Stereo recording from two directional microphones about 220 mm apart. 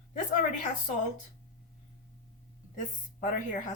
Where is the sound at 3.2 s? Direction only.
35° left (ahead or behind).